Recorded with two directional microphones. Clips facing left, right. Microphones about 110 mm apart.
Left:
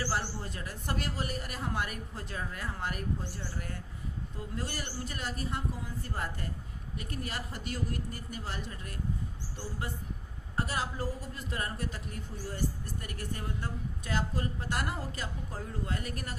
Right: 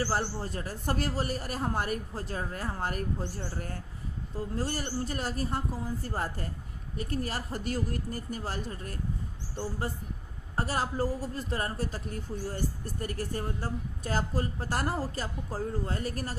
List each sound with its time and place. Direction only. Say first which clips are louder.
0.0 s a woman's voice: right 4 dB; 35° right (ahead or behind)
10.5 s a woman's voice: right 3 dB; 40° right (ahead or behind)